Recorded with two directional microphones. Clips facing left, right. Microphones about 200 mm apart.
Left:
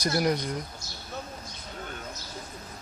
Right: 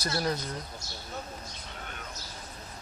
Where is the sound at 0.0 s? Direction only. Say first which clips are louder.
Left 5 dB; 15° left (ahead or behind).